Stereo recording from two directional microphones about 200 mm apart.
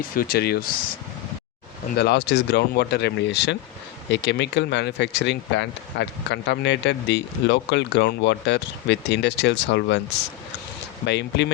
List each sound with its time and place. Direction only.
0.2 s speech: 50° left (ahead or behind)
2.0 s speech: 55° left (ahead or behind)
11.0 s speech: 60° left (ahead or behind)